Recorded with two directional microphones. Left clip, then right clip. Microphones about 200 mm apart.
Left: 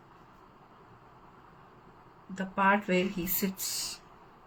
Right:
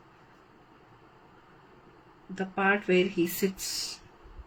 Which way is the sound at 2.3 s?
25° right (ahead or behind).